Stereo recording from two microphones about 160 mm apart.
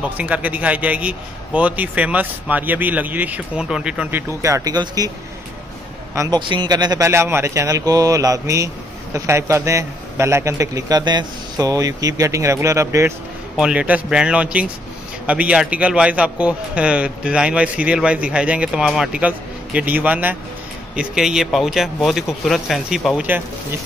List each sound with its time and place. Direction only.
0.0 s a man's voice: 10° right (ahead or behind)
4.3 s a man's voice: 20° right (ahead or behind)
6.1 s a man's voice: 25° right (ahead or behind)
13.6 s a man's voice: 5° right (ahead or behind)